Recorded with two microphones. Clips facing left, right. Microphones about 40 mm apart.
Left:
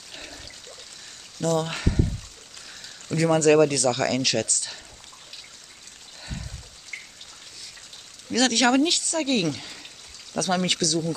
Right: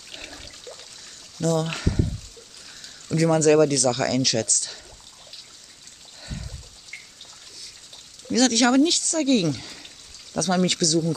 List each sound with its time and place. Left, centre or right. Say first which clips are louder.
1.6 s speech: even; centre
3.1 s speech: right 1 dB; centre
8.3 s speech: right 1 dB; centre